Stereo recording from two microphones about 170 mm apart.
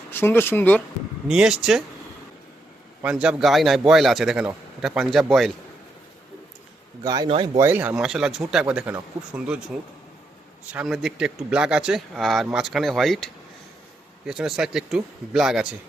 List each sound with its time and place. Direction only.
0.1 s speech: 10° left (ahead or behind)
1.3 s speech: 5° right (ahead or behind)
3.0 s speech: 5° right (ahead or behind)
7.0 s speech: 20° right (ahead or behind)
7.6 s speech: 10° right (ahead or behind)
10.7 s speech: 5° right (ahead or behind)